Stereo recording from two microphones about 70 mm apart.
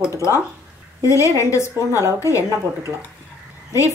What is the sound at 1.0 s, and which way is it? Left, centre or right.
Speech, left.